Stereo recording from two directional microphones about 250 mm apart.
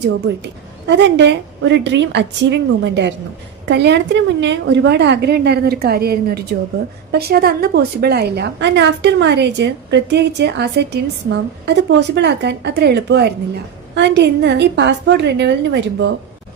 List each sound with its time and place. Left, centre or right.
0.9 s a woman's voice: right